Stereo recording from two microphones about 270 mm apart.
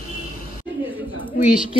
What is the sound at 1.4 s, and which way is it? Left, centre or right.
Speech, centre.